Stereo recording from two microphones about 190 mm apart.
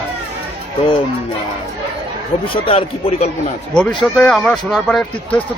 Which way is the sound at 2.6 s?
30° left (ahead or behind).